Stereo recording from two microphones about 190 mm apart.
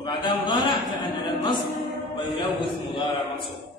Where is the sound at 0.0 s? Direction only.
25° left (ahead or behind).